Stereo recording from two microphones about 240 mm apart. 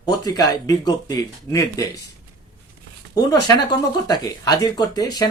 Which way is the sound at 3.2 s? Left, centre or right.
Centre.